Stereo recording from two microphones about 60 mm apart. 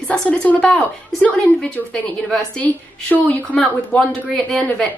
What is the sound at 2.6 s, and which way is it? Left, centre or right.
A woman's voice, left.